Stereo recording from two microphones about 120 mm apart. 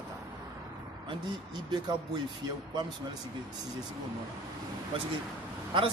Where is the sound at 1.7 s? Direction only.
35° right (ahead or behind).